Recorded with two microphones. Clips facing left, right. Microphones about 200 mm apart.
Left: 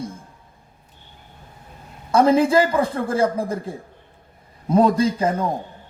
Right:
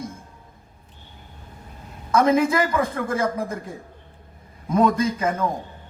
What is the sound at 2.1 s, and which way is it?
A man's voice, 30° left (ahead or behind).